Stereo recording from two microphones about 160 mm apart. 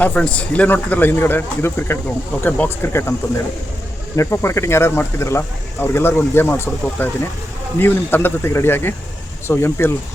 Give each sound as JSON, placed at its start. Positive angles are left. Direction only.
{"t": 0.0, "sound": "speech", "side_deg": 5}
{"t": 4.2, "sound": "speech", "side_deg": 15}